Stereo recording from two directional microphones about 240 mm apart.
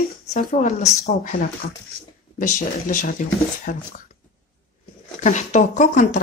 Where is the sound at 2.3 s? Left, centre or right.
Left.